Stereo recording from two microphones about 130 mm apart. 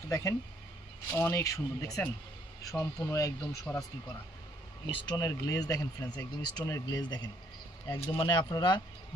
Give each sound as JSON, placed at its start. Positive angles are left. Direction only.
{"t": 0.1, "sound": "speech", "side_deg": 25}
{"t": 2.7, "sound": "speech", "side_deg": 5}
{"t": 3.1, "sound": "speech", "side_deg": 25}
{"t": 4.9, "sound": "speech", "side_deg": 40}
{"t": 8.0, "sound": "speech", "side_deg": 20}
{"t": 8.3, "sound": "speech", "side_deg": 35}